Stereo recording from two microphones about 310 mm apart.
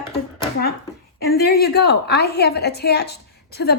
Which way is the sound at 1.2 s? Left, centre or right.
Left.